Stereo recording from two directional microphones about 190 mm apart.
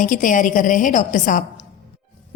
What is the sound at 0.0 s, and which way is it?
A woman's voice, 45° left (ahead or behind).